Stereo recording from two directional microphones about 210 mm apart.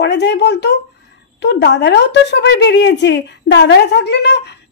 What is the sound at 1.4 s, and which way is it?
A woman's voice, 55° left (ahead or behind).